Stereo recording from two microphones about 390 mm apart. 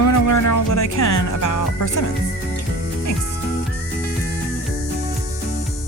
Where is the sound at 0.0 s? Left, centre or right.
Left.